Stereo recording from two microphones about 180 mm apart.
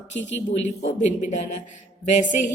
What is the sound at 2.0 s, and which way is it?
Speech, 40° left (ahead or behind).